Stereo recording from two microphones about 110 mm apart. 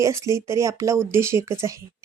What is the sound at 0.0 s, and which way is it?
Speech, 25° right (ahead or behind).